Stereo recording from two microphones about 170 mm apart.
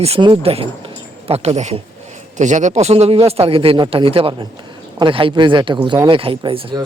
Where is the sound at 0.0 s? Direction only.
30° right (ahead or behind).